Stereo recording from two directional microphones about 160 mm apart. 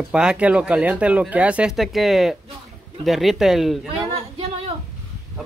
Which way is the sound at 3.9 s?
35° right (ahead or behind).